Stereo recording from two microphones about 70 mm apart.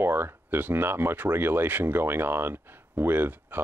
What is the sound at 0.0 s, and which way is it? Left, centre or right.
Speech, right.